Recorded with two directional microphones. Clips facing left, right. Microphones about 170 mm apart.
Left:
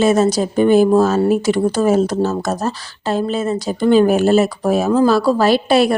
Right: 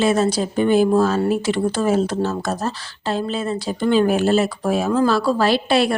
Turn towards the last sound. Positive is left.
turn(degrees=45)  # may be behind; listen again after turning